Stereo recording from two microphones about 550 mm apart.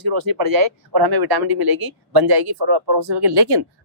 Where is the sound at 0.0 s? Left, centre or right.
Right.